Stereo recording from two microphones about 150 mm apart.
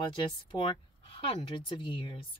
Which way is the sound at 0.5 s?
35° left (ahead or behind).